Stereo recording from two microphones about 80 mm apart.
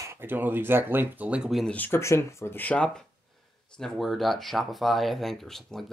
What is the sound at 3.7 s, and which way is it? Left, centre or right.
Speech, centre.